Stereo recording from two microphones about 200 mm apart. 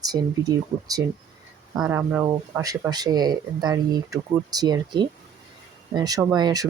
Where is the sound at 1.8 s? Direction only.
10° right (ahead or behind).